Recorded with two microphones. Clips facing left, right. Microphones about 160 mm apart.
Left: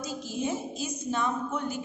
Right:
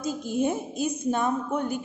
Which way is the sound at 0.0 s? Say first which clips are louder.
Right 6 dB; 50° right (ahead or behind).